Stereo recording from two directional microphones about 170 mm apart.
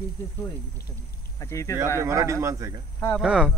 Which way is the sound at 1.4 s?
20° left (ahead or behind).